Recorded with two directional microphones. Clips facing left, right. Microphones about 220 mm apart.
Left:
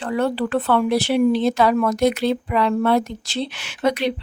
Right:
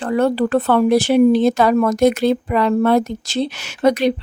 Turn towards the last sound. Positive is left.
turn(degrees=-40)  # may be behind; listen again after turning